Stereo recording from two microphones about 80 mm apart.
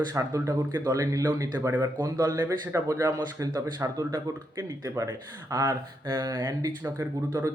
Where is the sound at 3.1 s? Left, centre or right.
Right.